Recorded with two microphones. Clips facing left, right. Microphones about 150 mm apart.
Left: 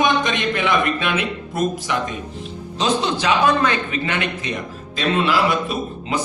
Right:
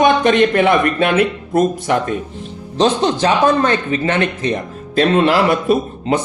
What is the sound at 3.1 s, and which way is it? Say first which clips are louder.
Speech: right 4 dB; 45° right (ahead or behind).